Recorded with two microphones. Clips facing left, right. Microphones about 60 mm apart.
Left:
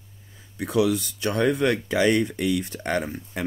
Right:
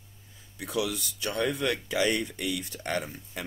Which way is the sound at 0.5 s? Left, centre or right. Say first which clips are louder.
Left 9 dB; left.